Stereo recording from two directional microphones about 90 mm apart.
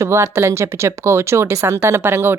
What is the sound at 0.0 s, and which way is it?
Speech, 30° right (ahead or behind).